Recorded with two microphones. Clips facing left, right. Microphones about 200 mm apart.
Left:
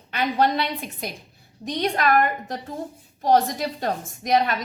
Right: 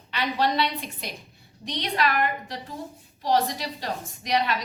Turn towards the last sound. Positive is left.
turn(degrees=50)  # may be behind; listen again after turning